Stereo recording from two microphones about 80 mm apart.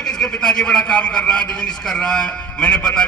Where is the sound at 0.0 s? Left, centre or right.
Centre.